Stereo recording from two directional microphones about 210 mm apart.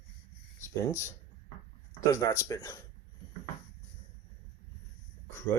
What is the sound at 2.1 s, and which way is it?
Speech, 15° left (ahead or behind).